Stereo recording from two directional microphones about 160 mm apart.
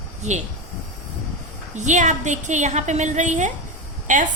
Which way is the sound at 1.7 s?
50° right (ahead or behind).